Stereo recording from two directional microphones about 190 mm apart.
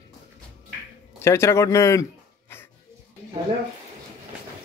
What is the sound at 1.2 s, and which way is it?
Speech, 15° left (ahead or behind).